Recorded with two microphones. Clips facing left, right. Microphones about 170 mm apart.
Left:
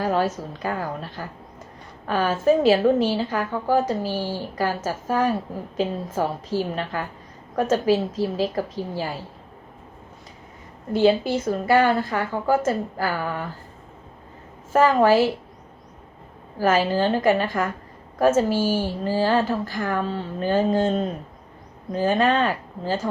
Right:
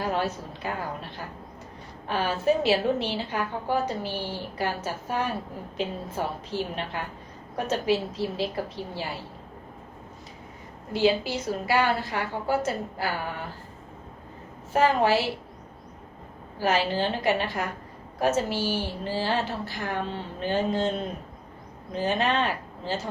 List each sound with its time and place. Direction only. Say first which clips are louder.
0.0 s a woman's voice: left 5 dB; 45° left (ahead or behind)
10.9 s a woman's voice: left 5 dB; 50° left (ahead or behind)
14.7 s a woman's voice: left 5 dB; 45° left (ahead or behind)
16.6 s a woman's voice: left 5 dB; 45° left (ahead or behind)